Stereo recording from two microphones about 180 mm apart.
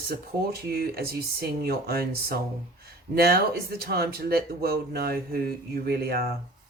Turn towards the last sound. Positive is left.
turn(degrees=-60)  # may be behind; listen again after turning